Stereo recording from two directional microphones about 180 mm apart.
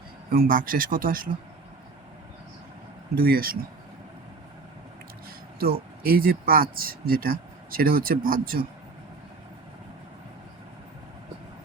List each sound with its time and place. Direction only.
0.3 s speech: 55° right (ahead or behind)
3.2 s speech: 55° right (ahead or behind)
5.5 s speech: 55° right (ahead or behind)